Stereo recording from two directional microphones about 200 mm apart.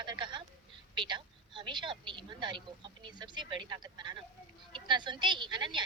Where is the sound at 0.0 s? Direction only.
20° right (ahead or behind).